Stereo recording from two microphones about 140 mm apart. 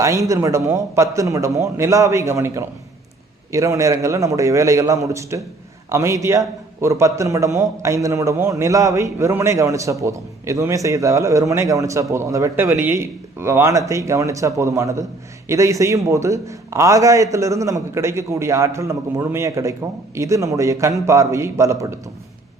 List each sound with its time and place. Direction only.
0.0 s a man's voice: 20° right (ahead or behind)